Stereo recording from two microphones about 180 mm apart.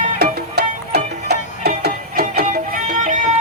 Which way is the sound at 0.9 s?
65° right (ahead or behind).